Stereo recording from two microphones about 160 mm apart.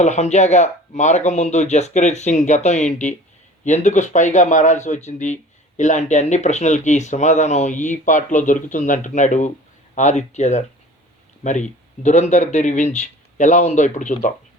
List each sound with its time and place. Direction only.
0.0 s speech: 45° left (ahead or behind)